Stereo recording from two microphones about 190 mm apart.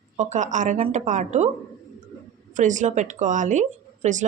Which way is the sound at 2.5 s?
40° right (ahead or behind).